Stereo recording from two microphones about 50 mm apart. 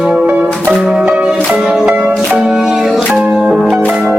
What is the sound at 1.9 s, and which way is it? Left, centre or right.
Music, right.